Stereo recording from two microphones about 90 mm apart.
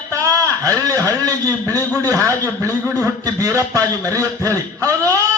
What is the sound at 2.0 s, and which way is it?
A man's voice, 40° right (ahead or behind).